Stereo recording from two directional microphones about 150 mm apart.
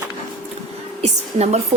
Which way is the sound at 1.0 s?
45° right (ahead or behind).